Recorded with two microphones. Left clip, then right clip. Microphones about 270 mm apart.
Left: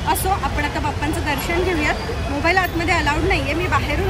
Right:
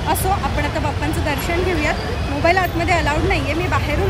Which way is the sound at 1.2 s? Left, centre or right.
Centre.